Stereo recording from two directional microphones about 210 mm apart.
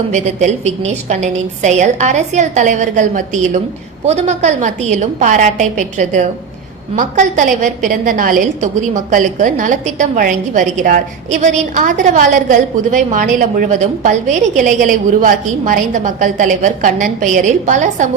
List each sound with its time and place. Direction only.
0.1 s a woman's voice: 35° right (ahead or behind)